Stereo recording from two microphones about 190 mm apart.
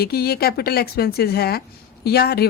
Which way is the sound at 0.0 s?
55° left (ahead or behind).